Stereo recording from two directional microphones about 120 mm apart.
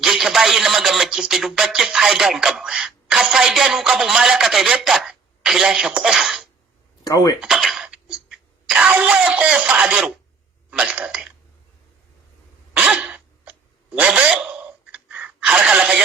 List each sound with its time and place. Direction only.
0.0 s speech: centre (ahead or behind)
7.0 s speech: 30° left (ahead or behind)
7.4 s throat clearing: centre (ahead or behind)
10.7 s speech: 10° right (ahead or behind)
12.7 s sneeze: 5° right (ahead or behind)
14.0 s a sound: 5° right (ahead or behind)